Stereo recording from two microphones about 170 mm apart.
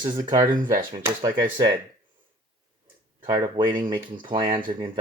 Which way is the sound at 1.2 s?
25° right (ahead or behind).